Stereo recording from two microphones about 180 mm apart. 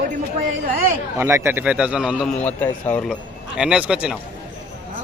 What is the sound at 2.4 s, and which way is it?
Speech, 10° left (ahead or behind).